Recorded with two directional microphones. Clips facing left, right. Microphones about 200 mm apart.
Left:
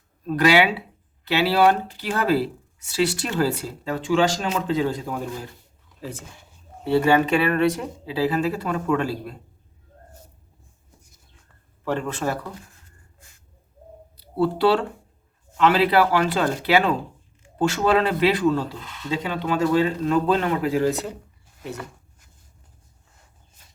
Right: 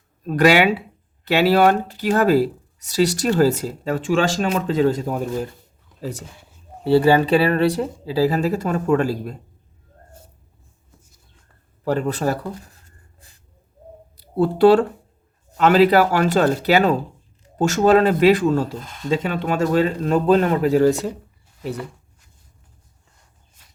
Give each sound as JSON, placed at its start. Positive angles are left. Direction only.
{"t": 0.3, "sound": "speech", "side_deg": -45}
{"t": 11.9, "sound": "speech", "side_deg": -40}
{"t": 14.2, "sound": "speech", "side_deg": -50}